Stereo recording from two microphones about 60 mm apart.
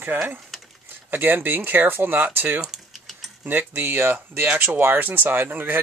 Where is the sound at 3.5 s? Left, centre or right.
Right.